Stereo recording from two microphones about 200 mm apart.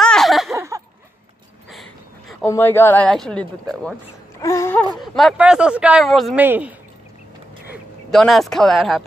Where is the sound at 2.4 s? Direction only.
10° left (ahead or behind).